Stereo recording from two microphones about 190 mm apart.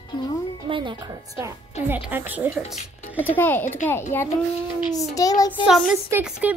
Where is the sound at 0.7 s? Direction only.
25° right (ahead or behind).